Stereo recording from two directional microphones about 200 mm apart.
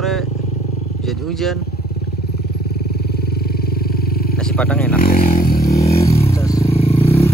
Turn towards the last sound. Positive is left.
turn(degrees=30)  # may be behind; listen again after turning